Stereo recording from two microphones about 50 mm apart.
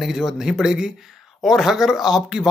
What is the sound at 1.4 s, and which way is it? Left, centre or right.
Speech, centre.